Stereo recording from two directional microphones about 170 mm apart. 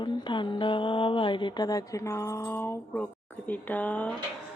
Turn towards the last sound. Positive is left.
turn(degrees=10)  # may be behind; listen again after turning